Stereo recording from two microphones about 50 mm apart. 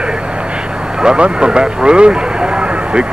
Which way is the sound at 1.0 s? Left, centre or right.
Centre.